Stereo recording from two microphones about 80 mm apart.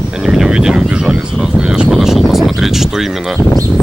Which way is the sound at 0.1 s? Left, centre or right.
Centre.